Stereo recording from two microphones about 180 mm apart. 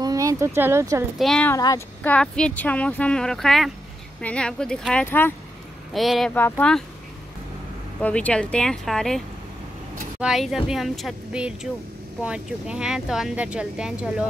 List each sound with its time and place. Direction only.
0.0 s speech: 20° right (ahead or behind)
1.1 s speech: centre (ahead or behind)
1.5 s speech: 20° left (ahead or behind)
2.0 s speech: 5° left (ahead or behind)
5.9 s speech: centre (ahead or behind)
8.0 s speech: 5° left (ahead or behind)
10.2 s speech: centre (ahead or behind)